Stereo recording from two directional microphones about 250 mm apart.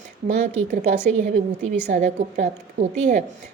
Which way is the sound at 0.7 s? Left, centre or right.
Right.